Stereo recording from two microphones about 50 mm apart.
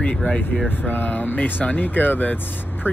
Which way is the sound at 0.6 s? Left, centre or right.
Left.